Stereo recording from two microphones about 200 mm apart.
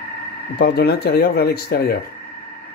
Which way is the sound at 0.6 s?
55° left (ahead or behind).